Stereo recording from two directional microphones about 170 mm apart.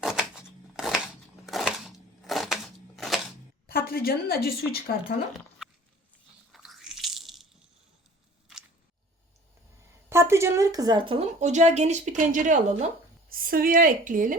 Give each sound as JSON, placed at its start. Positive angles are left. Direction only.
{"t": 0.0, "sound": "a sound", "side_deg": -5}
{"t": 3.8, "sound": "speech", "side_deg": 65}
{"t": 6.5, "sound": "squish", "side_deg": 0}
{"t": 10.1, "sound": "a woman's voice", "side_deg": -15}
{"t": 11.3, "sound": "speech", "side_deg": -45}